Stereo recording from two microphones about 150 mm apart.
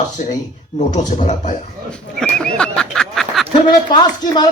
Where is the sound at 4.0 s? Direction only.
30° left (ahead or behind).